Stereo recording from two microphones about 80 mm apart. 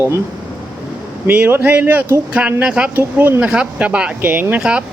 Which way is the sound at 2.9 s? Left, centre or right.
Right.